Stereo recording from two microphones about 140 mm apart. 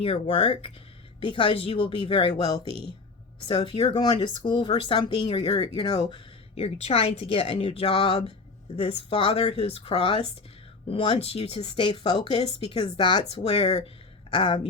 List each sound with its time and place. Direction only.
0.0 s speech: 45° left (ahead or behind)
6.6 s speech: 45° left (ahead or behind)